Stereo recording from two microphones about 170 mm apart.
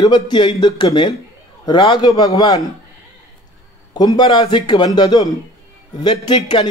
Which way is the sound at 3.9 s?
25° left (ahead or behind).